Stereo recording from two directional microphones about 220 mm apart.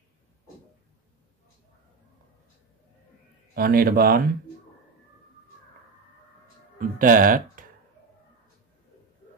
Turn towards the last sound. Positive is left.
turn(degrees=-40)  # may be behind; listen again after turning